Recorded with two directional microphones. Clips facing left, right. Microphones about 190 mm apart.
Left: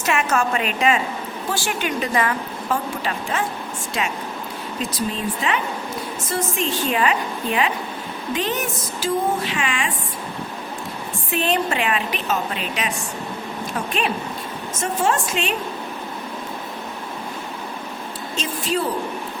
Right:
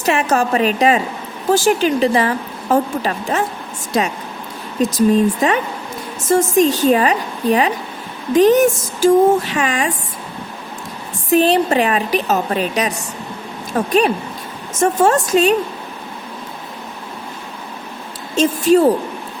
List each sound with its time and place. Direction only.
0.0 s a woman's voice: 35° right (ahead or behind)
11.3 s a woman's voice: 35° right (ahead or behind)
18.3 s speech: 45° right (ahead or behind)